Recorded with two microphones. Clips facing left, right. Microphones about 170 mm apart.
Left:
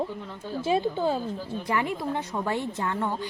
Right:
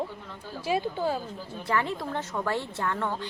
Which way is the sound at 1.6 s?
15° left (ahead or behind).